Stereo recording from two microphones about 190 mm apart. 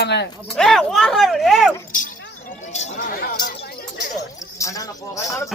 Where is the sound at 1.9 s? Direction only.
45° left (ahead or behind).